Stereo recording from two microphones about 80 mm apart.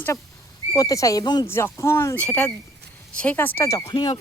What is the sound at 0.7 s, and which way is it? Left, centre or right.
Speech, left.